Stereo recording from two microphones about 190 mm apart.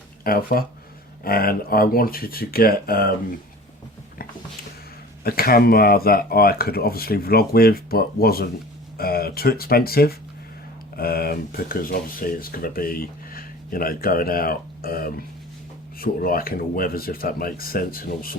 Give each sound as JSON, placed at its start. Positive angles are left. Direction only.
{"t": 0.3, "sound": "speech", "side_deg": 50}
{"t": 5.2, "sound": "speech", "side_deg": 55}